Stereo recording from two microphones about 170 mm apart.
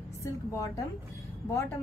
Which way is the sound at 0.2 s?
20° left (ahead or behind).